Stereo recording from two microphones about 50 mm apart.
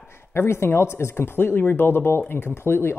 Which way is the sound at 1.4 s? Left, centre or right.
Left.